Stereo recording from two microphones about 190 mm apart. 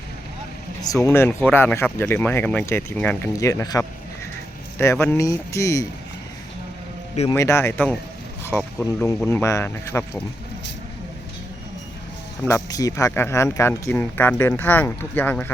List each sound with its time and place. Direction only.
0.9 s speech: 15° left (ahead or behind)
7.3 s speech: 15° left (ahead or behind)
12.5 s speech: 15° left (ahead or behind)